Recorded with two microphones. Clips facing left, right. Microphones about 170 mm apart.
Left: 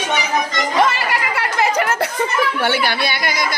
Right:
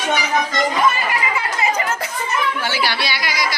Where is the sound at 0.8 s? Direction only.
80° left.